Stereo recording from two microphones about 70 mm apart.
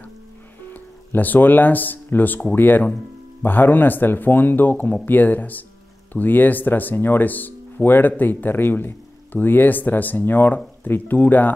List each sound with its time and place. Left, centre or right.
0.7 s speech: left